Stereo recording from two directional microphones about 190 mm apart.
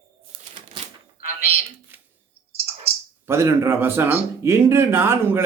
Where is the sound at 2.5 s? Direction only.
35° right (ahead or behind).